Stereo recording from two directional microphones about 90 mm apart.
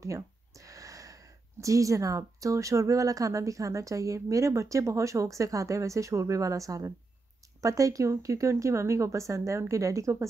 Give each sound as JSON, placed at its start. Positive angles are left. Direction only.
{"t": 0.0, "sound": "speech", "side_deg": -35}